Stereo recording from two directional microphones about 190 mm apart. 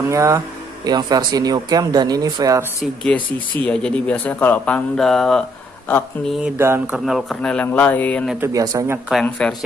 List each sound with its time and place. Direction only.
0.1 s a man's voice: 15° right (ahead or behind)
2.8 s speech: 5° left (ahead or behind)
6.6 s a man's voice: 15° right (ahead or behind)
7.1 s speech: centre (ahead or behind)
8.4 s a man's voice: 15° right (ahead or behind)
9.1 s speech: 5° left (ahead or behind)